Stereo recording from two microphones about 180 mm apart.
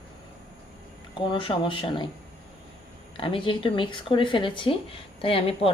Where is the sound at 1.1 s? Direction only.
30° left (ahead or behind).